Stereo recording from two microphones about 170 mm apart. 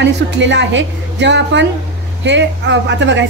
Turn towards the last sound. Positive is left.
turn(degrees=-90)